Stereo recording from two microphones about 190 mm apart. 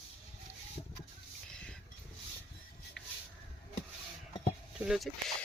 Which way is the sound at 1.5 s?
5° left (ahead or behind).